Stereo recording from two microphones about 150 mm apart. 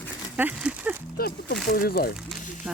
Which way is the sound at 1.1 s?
90° left.